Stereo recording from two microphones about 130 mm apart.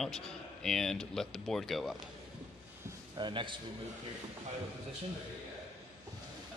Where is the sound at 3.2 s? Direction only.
40° right (ahead or behind).